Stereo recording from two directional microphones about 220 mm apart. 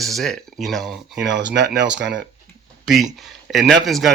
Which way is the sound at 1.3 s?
55° right (ahead or behind).